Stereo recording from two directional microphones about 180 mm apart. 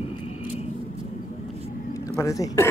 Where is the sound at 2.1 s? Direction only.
15° left (ahead or behind).